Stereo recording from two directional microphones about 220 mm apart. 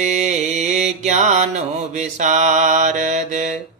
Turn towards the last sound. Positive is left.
turn(degrees=-35)  # may be behind; listen again after turning